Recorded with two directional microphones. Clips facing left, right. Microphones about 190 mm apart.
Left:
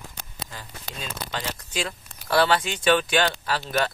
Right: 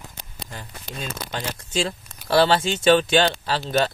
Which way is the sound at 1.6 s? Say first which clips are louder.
Right 5 dB; 30° right (ahead or behind).